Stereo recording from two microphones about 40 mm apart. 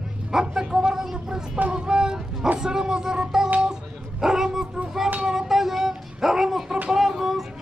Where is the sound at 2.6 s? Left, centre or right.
Centre.